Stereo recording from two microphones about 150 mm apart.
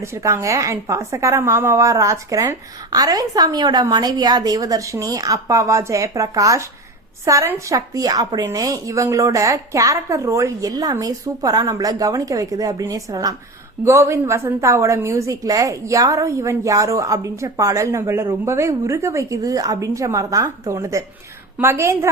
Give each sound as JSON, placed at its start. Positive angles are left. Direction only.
{"t": 0.0, "sound": "a woman's voice", "side_deg": -20}